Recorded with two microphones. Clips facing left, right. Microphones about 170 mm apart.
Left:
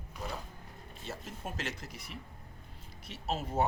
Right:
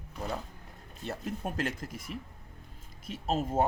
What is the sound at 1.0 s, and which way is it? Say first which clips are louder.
Speech: right 7 dB; 60° right (ahead or behind).